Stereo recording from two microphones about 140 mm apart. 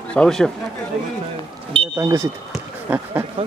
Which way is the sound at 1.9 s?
20° right (ahead or behind).